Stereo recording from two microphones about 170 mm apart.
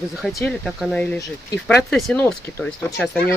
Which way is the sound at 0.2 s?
Centre (ahead or behind).